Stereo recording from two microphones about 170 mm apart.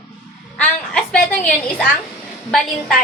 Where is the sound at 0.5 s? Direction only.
5° left (ahead or behind).